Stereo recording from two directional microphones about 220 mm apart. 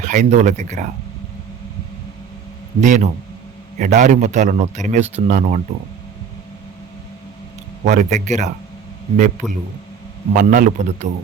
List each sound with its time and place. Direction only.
0.0 s a man's voice: 35° right (ahead or behind)
2.8 s a man's voice: 35° right (ahead or behind)
7.9 s a man's voice: 35° right (ahead or behind)